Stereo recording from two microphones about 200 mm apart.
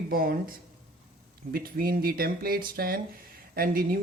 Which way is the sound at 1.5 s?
45° right (ahead or behind).